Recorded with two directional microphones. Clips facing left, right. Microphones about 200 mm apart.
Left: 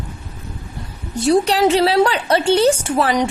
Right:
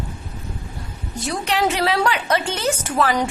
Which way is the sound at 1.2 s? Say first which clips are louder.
Left 8 dB; 35° left (ahead or behind).